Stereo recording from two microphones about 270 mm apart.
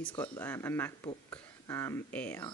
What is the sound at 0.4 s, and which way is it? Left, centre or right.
Speech, centre.